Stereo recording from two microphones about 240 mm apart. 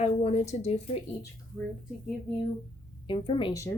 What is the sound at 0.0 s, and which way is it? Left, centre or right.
Speech, left.